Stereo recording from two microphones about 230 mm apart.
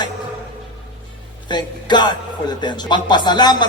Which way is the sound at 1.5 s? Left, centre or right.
Centre.